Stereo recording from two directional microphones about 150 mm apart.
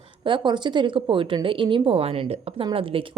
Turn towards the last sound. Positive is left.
turn(degrees=-35)  # may be behind; listen again after turning